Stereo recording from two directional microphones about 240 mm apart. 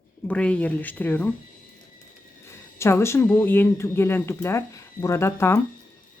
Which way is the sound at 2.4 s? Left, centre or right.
Centre.